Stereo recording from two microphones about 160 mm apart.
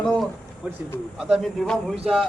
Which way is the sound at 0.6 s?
10° right (ahead or behind).